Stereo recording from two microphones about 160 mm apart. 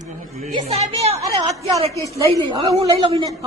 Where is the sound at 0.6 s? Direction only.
40° right (ahead or behind).